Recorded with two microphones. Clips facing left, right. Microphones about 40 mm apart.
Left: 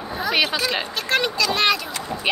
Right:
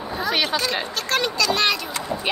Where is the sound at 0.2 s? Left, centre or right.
Centre.